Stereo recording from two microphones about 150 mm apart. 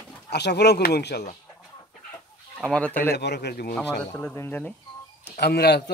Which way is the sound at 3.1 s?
90° left.